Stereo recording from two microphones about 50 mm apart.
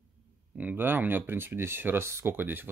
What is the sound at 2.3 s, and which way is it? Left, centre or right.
Speech, right.